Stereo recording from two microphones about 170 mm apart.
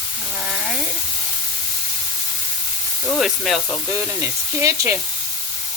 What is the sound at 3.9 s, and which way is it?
Speech, 15° right (ahead or behind).